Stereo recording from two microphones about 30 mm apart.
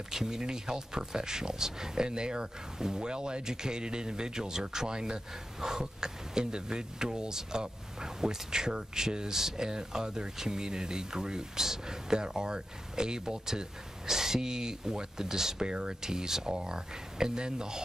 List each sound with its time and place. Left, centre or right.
0.1 s speech: right